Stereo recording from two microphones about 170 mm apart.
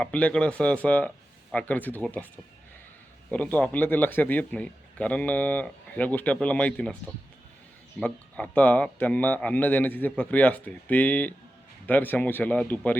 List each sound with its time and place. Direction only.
0.0 s a man's voice: 10° left (ahead or behind)
3.2 s a man's voice: 10° left (ahead or behind)
7.9 s a man's voice: 5° left (ahead or behind)